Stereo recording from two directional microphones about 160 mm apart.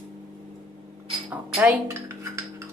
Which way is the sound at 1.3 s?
15° right (ahead or behind).